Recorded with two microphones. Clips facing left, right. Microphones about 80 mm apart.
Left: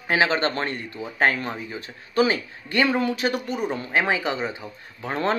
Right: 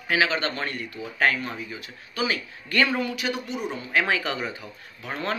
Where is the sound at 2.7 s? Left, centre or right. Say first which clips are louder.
Left 2 dB; left.